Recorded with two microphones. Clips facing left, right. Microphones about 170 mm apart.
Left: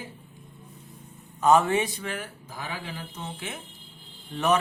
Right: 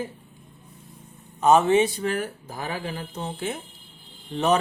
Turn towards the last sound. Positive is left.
turn(degrees=-30)  # may be behind; listen again after turning